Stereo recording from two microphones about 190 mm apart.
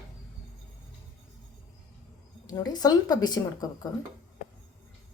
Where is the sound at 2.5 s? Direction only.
20° left (ahead or behind).